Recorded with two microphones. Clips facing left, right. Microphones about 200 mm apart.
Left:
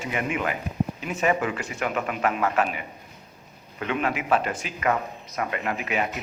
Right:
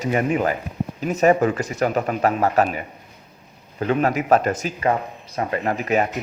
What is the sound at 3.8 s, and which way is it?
Speech, 40° right (ahead or behind).